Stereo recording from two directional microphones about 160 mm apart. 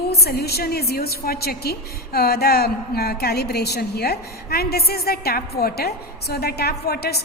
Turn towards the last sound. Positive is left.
turn(degrees=85)